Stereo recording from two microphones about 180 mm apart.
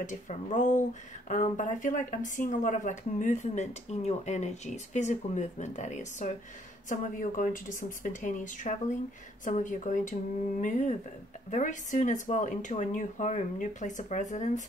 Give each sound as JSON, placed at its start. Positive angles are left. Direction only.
{"t": 0.0, "sound": "speech", "side_deg": 45}